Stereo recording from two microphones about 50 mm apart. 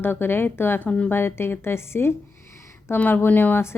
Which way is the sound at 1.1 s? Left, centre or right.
Left.